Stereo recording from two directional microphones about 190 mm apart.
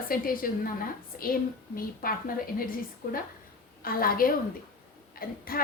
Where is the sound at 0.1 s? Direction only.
50° left (ahead or behind).